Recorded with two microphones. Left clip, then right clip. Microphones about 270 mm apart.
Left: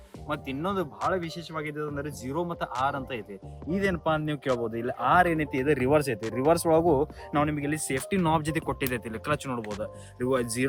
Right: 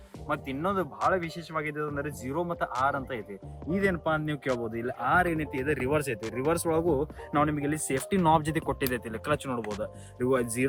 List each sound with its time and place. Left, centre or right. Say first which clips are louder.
0.3 s speech: right 1 dB; centre
4.6 s speech: left 3 dB; left
7.3 s speech: even; centre